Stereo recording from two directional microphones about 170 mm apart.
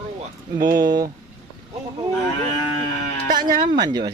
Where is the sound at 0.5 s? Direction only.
25° right (ahead or behind).